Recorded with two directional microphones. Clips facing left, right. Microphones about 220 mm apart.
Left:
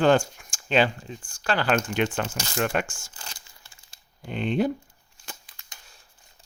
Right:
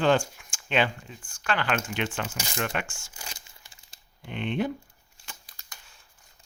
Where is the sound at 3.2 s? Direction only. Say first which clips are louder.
Right 3 dB; 10° right (ahead or behind).